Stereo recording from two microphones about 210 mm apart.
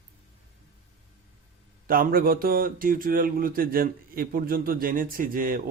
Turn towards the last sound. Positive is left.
turn(degrees=-40)  # may be behind; listen again after turning